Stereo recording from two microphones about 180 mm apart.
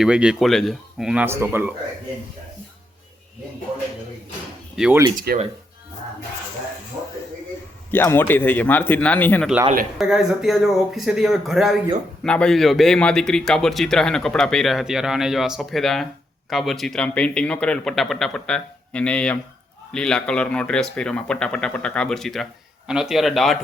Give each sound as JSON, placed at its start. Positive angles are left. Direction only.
{"t": 0.0, "sound": "a man's voice", "side_deg": -5}
{"t": 4.8, "sound": "speech", "side_deg": -10}
{"t": 5.3, "sound": "speech", "side_deg": -60}
{"t": 7.9, "sound": "speech", "side_deg": 10}
{"t": 10.0, "sound": "a man's voice", "side_deg": 0}